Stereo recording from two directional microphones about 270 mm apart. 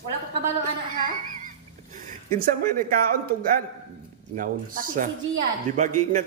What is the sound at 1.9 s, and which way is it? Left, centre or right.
Speech, right.